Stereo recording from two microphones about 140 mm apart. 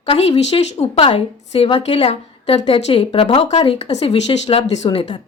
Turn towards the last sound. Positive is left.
turn(degrees=45)  # may be behind; listen again after turning